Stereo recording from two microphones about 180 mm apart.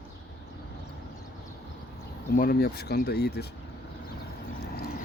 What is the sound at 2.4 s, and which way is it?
Speech, 60° left (ahead or behind).